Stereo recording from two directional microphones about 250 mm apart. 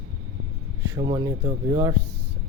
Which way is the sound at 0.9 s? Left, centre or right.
Centre.